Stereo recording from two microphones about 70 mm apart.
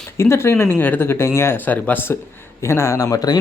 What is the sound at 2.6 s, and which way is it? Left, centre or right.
Speech, left.